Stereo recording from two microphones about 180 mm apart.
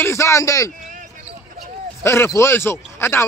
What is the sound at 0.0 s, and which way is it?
Speech, 15° left (ahead or behind).